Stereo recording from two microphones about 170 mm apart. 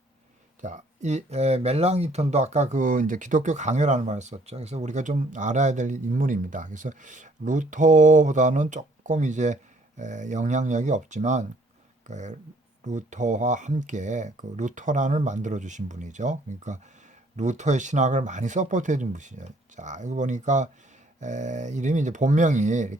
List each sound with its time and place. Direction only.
0.6 s speech: 45° right (ahead or behind)